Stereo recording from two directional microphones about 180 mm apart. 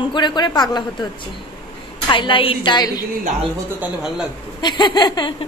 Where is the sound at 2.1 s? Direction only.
30° left (ahead or behind).